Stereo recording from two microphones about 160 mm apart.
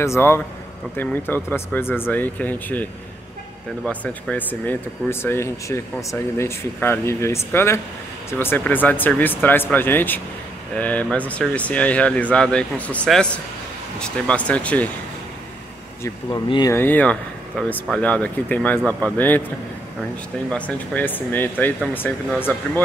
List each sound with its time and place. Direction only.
0.0 s speech: 15° left (ahead or behind)
4.0 s speech: 10° left (ahead or behind)
16.0 s speech: 25° left (ahead or behind)
16.7 s speech: 10° left (ahead or behind)
20.4 s speech: 10° left (ahead or behind)